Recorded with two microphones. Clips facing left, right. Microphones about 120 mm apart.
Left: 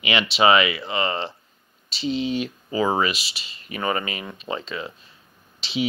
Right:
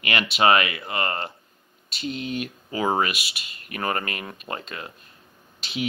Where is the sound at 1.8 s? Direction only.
55° right (ahead or behind).